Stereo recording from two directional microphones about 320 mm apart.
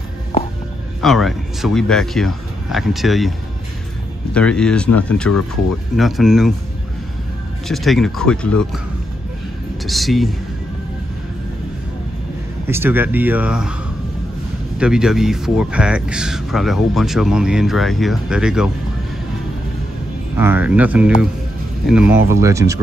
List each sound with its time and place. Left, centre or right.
1.0 s speech: centre
7.6 s speech: centre
9.8 s speech: centre
12.6 s speech: centre
14.8 s speech: centre
20.3 s speech: centre
22.1 s speech: centre